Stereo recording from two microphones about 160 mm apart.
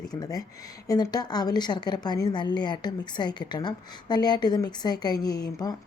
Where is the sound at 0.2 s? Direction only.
20° left (ahead or behind).